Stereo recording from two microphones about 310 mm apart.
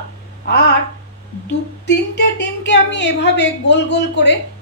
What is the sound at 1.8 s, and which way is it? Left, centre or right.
A woman's voice, left.